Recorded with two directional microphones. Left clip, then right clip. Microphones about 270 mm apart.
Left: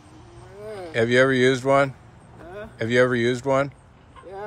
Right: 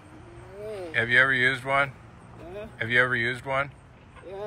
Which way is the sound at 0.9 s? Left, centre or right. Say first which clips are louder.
Left 2 dB; left.